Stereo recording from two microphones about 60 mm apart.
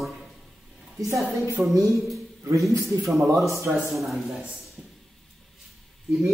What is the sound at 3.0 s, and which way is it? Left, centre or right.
A man's voice, centre.